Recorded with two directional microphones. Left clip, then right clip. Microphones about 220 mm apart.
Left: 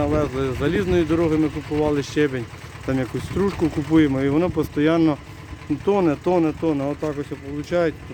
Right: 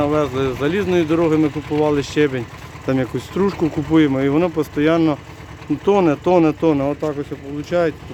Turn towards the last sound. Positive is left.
turn(degrees=0)  # may be behind; listen again after turning